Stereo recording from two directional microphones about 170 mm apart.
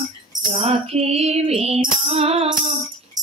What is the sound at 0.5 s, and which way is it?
Music, 35° right (ahead or behind).